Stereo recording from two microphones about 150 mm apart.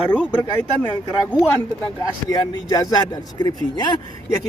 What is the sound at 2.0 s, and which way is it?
Speech, 25° left (ahead or behind).